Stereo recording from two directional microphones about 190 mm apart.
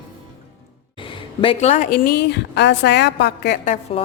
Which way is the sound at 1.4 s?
30° left (ahead or behind).